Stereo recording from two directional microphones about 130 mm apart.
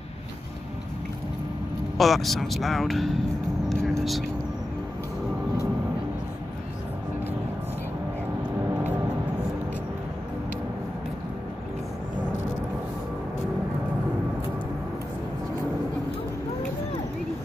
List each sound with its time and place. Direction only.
2.0 s speech: centre (ahead or behind)
3.6 s vehicle: 5° left (ahead or behind)